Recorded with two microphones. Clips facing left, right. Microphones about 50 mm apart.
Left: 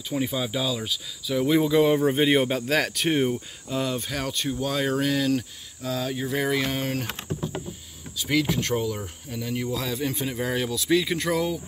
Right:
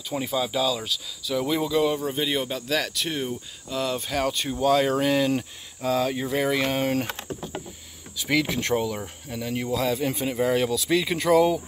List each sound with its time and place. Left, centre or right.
0.2 s speech: centre
2.0 s speech: left
3.8 s speech: centre
8.3 s speech: centre